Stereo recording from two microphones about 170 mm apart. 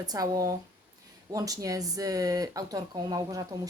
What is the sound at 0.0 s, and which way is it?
Speech, 20° right (ahead or behind).